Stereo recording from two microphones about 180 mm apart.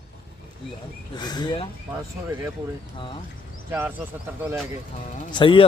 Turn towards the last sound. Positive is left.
turn(degrees=30)  # may be behind; listen again after turning